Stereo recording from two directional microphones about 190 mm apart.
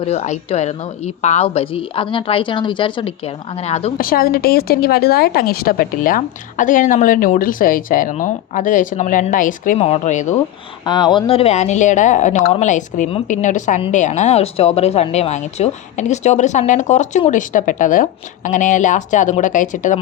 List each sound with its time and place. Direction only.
0.0 s a woman's voice: 35° left (ahead or behind)
3.9 s a woman's voice: 50° left (ahead or behind)
10.8 s a woman's voice: 25° left (ahead or behind); by 20.0 s 40° left (ahead or behind)